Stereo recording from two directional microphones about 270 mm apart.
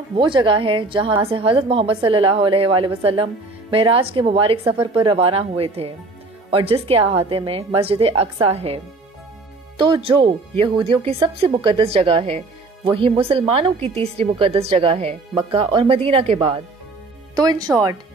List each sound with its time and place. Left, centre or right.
0.1 s speech: centre